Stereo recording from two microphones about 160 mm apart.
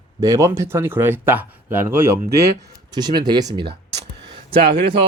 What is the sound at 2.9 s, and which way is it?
Speech, 25° right (ahead or behind).